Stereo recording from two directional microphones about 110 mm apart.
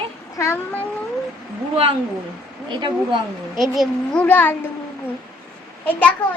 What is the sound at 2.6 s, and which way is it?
Speech, 45° right (ahead or behind).